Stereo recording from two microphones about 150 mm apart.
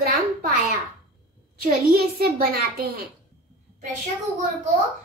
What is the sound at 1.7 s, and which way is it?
Speech, 90° right.